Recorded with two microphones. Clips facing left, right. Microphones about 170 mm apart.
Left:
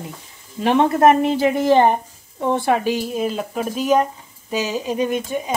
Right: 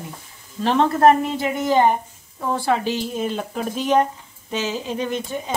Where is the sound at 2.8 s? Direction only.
5° left (ahead or behind).